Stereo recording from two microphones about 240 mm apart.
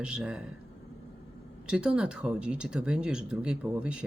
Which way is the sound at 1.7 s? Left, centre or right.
Centre.